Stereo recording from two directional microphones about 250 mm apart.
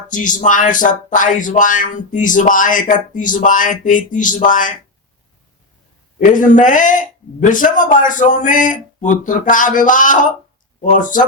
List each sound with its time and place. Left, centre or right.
0.1 s speech: left
6.1 s speech: left